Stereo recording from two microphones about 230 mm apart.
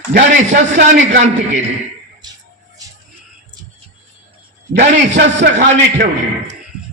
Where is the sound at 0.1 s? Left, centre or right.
Right.